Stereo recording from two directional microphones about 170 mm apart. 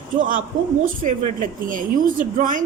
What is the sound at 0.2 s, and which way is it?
Speech, 50° right (ahead or behind).